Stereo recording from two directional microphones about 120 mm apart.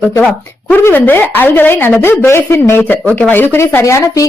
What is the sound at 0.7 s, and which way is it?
A woman's voice, 15° left (ahead or behind).